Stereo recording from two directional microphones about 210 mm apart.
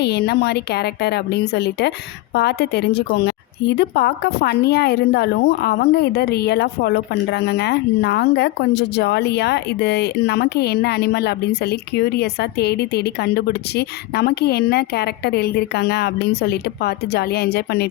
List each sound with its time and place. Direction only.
0.0 s a woman's voice: 50° left (ahead or behind)